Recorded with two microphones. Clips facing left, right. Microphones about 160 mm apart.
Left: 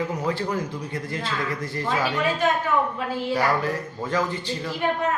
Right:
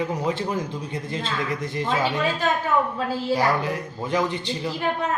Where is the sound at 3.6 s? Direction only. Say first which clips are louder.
Left 1 dB; 20° right (ahead or behind).